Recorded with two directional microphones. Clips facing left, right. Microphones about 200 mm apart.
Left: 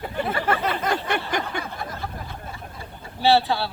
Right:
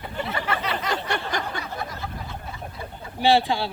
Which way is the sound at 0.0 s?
50° left (ahead or behind).